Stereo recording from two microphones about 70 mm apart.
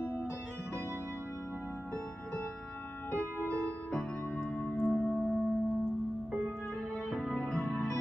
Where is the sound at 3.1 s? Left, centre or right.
Left.